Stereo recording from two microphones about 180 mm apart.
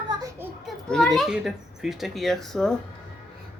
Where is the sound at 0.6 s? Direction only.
Centre (ahead or behind).